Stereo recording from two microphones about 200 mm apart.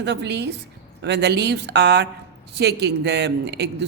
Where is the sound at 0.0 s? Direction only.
60° right (ahead or behind).